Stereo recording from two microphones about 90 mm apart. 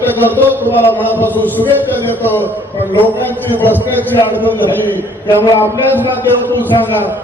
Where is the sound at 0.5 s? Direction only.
20° left (ahead or behind).